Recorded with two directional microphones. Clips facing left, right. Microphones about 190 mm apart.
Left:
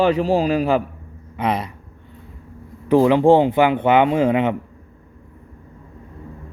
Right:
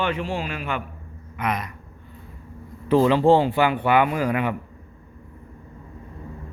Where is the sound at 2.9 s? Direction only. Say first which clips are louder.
Left 3 dB; 15° left (ahead or behind).